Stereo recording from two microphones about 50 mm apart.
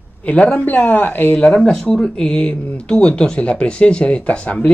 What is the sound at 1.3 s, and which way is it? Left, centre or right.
Speech, left.